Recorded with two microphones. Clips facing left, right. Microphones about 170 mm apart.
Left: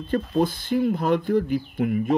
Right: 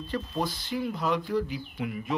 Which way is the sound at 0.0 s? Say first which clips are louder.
Left 8 dB; 55° left (ahead or behind).